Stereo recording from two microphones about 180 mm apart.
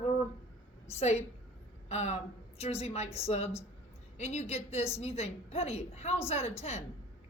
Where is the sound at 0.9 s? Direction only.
35° left (ahead or behind).